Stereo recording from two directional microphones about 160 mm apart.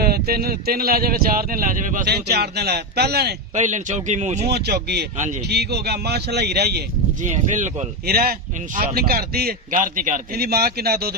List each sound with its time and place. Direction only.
0.0 s speech: 75° right (ahead or behind); by 3.3 s 90° right
3.5 s a man's voice: 50° right (ahead or behind)
4.4 s speech: 90° right
7.2 s a man's voice: 50° right (ahead or behind)
8.0 s speech: 70° right (ahead or behind)